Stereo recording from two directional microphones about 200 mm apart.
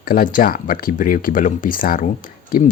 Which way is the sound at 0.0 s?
45° left (ahead or behind).